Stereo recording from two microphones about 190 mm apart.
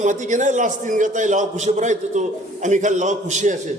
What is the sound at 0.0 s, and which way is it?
A man's voice, 40° right (ahead or behind).